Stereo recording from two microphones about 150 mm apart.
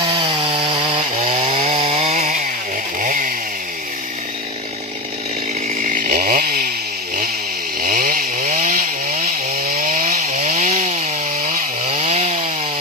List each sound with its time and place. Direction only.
0.0 s chainsaw: 30° right (ahead or behind); by 2.4 s 50° right (ahead or behind)
3.0 s chainsaw: 65° right (ahead or behind)
5.8 s chainsaw: 60° right (ahead or behind); by 6.7 s 75° right (ahead or behind)
7.8 s chainsaw: 75° right (ahead or behind)
11.9 s chainsaw: 40° right (ahead or behind)